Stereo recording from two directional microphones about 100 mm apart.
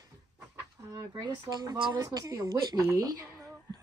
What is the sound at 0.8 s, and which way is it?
Speech, 40° right (ahead or behind).